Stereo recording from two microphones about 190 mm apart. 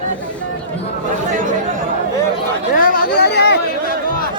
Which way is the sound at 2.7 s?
50° left (ahead or behind).